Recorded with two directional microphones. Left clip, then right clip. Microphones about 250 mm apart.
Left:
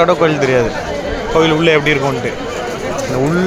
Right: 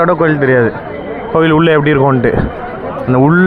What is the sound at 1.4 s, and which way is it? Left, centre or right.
Speech, right.